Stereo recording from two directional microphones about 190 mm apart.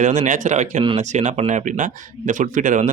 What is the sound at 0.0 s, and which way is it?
Speech, 40° right (ahead or behind).